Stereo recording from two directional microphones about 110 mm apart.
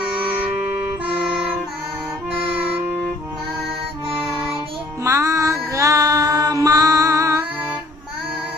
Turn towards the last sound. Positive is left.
turn(degrees=-30)  # may be behind; listen again after turning